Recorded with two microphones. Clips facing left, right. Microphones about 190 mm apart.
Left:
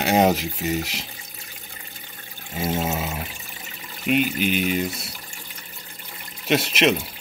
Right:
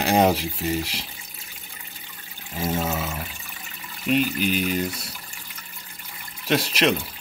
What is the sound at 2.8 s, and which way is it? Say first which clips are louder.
Water: left 1 dB; 25° left (ahead or behind).